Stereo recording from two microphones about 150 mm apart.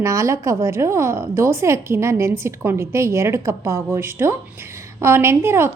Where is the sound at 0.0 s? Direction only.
20° right (ahead or behind).